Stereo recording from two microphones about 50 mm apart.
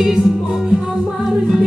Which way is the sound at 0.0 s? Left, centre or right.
Centre.